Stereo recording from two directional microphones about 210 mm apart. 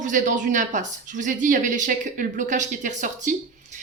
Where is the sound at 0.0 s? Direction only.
35° right (ahead or behind).